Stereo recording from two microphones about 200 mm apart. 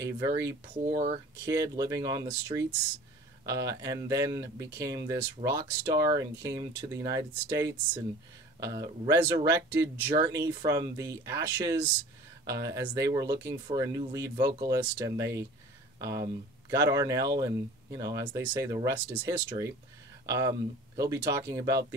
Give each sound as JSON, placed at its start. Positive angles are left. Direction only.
{"t": 0.0, "sound": "speech", "side_deg": -15}